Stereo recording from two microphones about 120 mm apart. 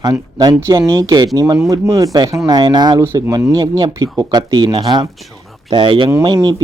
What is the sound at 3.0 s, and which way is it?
Speech, 20° right (ahead or behind).